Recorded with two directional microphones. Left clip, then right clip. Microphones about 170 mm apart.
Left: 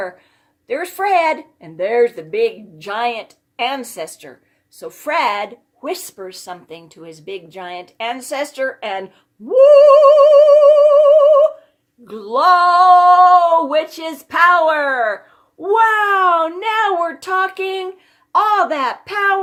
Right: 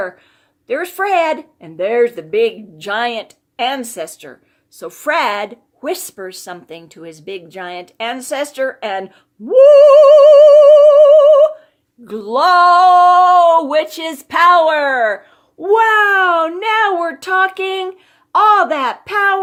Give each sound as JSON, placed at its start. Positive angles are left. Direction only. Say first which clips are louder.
{"t": 0.7, "sound": "a woman's voice", "louder": "right 1 dB", "side_deg": -40}
{"t": 9.5, "sound": "music", "louder": "right 2 dB", "side_deg": -40}
{"t": 12.0, "sound": "a woman's voice", "louder": "even", "side_deg": -45}